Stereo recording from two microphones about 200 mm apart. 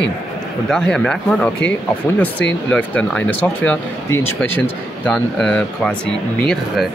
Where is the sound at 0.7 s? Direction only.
5° left (ahead or behind).